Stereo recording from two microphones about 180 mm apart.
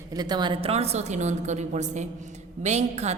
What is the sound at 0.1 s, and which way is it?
A woman's voice, 25° right (ahead or behind).